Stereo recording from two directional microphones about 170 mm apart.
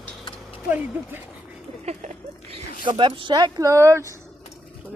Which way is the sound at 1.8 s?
45° right (ahead or behind).